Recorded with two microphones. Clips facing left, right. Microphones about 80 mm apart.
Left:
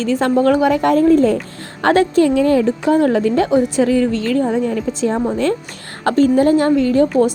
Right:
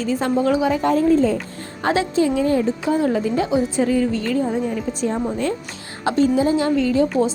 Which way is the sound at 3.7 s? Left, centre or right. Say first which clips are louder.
Left 4 dB; left.